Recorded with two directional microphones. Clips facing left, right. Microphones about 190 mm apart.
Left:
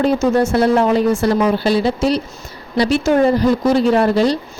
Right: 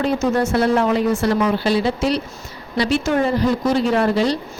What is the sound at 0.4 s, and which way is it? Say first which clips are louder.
A woman's voice: left 3 dB; 35° left (ahead or behind).